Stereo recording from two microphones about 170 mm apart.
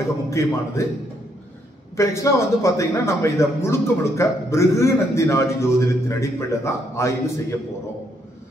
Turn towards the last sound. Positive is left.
turn(degrees=15)  # may be behind; listen again after turning